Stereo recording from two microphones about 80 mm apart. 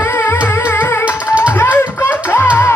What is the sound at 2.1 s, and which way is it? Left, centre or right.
Music, left.